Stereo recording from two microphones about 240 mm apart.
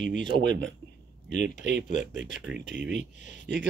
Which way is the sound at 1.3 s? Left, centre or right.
Left.